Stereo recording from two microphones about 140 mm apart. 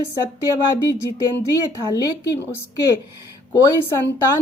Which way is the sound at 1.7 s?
25° left (ahead or behind).